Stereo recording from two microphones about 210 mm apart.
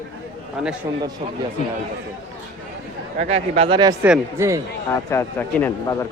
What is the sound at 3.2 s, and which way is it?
Speech, 30° right (ahead or behind).